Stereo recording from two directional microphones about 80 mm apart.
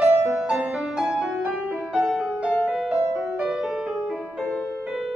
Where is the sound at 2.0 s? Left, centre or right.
Centre.